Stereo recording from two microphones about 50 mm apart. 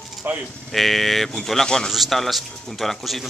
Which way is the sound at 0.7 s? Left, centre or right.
Centre.